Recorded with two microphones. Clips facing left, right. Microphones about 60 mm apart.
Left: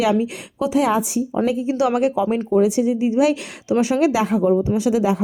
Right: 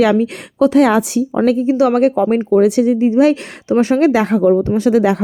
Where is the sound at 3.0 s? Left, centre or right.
Right.